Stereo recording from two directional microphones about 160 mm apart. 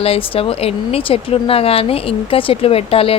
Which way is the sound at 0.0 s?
35° left (ahead or behind).